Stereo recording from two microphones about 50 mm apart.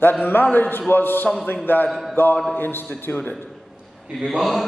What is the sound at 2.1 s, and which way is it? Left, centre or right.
Mantra, left.